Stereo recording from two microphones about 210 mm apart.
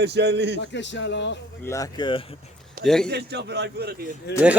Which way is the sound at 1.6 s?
15° left (ahead or behind).